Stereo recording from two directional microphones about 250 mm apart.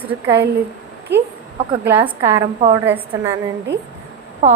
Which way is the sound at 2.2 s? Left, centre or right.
Centre.